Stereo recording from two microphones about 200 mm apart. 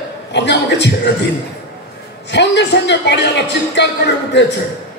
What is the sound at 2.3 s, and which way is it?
A man's voice, 60° left (ahead or behind).